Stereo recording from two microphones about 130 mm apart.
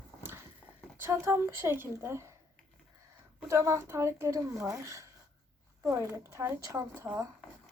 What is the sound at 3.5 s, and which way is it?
A woman's voice, 20° right (ahead or behind).